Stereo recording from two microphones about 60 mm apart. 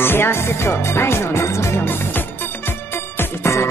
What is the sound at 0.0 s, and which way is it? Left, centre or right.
Speech, left.